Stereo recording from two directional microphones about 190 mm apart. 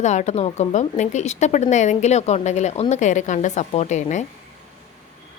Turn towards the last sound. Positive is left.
turn(degrees=40)  # may be behind; listen again after turning